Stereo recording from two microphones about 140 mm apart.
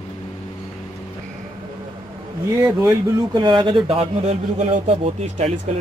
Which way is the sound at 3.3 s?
35° right (ahead or behind).